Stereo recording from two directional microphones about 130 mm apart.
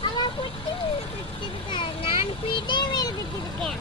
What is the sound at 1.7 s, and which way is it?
A child's voice, 40° left (ahead or behind).